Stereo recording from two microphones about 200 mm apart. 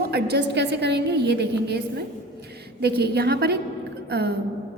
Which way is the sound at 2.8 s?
55° right (ahead or behind).